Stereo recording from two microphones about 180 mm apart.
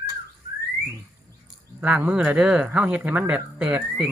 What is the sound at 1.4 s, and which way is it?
Speech, 5° right (ahead or behind).